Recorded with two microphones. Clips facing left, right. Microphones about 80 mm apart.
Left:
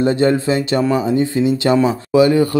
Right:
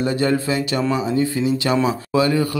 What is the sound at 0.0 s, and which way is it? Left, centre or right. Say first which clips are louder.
A man's voice: left 5 dB; left.